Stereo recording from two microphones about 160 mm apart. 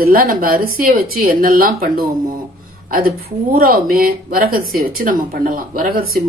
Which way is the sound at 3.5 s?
65° right (ahead or behind).